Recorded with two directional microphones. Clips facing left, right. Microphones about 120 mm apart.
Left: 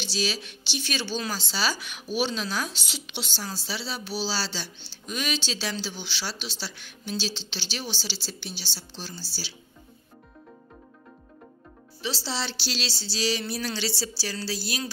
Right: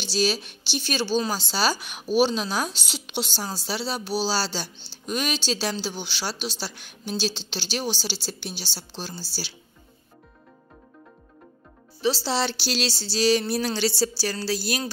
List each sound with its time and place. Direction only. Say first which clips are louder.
0.1 s a woman's voice: right 7 dB; 45° right (ahead or behind)
12.3 s a woman's voice: right 6 dB; 55° right (ahead or behind)